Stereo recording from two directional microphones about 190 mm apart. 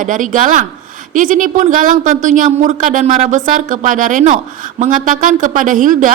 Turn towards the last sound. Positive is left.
turn(degrees=-45)  # may be behind; listen again after turning